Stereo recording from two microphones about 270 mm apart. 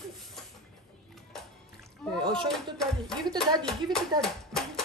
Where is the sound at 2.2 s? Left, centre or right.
Centre.